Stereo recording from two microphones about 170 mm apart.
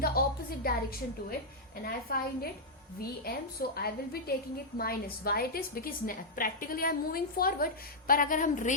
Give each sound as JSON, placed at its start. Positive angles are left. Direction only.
{"t": 0.0, "sound": "a sound", "side_deg": 60}
{"t": 1.8, "sound": "a woman's voice", "side_deg": 60}
{"t": 3.8, "sound": "a woman's voice", "side_deg": 65}